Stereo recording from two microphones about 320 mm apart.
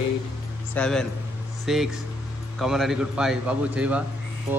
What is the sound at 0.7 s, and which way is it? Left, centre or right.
A man's voice, centre.